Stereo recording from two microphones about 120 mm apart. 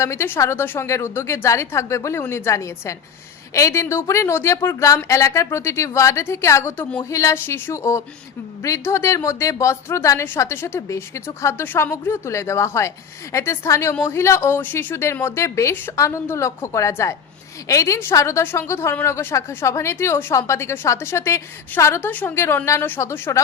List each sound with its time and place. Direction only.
0.0 s a woman's voice: 25° left (ahead or behind)